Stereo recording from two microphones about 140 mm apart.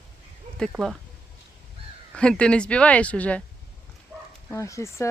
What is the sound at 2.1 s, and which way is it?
Speech, 5° left (ahead or behind).